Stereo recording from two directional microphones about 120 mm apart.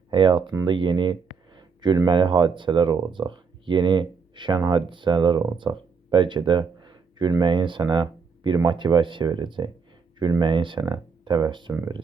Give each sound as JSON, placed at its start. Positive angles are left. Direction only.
{"t": 0.1, "sound": "speech", "side_deg": -45}
{"t": 1.5, "sound": "a sound", "side_deg": -40}
{"t": 2.0, "sound": "speech", "side_deg": -40}